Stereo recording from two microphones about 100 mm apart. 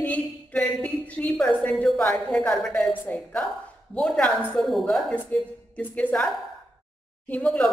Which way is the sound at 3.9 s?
5° left (ahead or behind).